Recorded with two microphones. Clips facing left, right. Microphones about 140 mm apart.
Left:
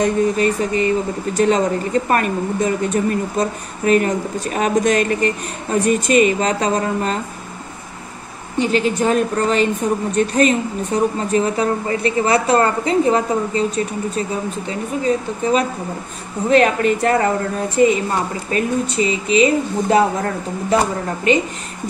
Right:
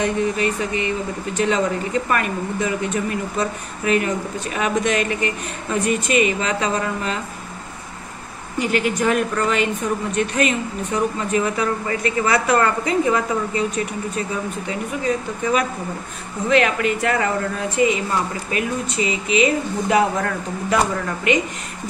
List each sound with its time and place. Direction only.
0.0 s speech: 40° left (ahead or behind)
8.5 s speech: 30° left (ahead or behind)